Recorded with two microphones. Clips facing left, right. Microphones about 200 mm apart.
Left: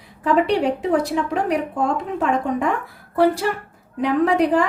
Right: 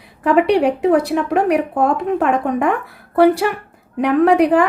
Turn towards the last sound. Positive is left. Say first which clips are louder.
# right 5 dB
turn(degrees=-65)  # may be behind; listen again after turning